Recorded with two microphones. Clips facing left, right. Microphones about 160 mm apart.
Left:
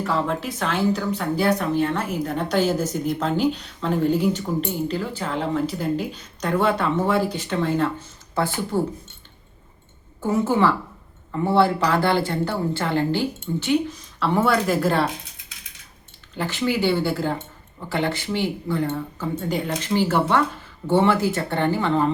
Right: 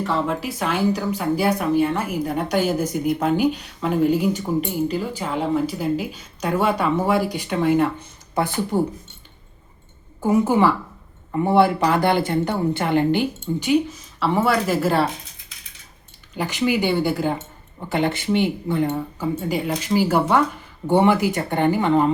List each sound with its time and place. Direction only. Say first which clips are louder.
0.0 s speech: right 1 dB; centre (ahead or behind)
10.2 s speech: right 3 dB; 15° right (ahead or behind)
14.2 s speech: right 1 dB; 5° right (ahead or behind)
16.3 s speech: right 2 dB; 15° right (ahead or behind)